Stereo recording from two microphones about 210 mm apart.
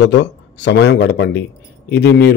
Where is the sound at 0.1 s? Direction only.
60° left (ahead or behind).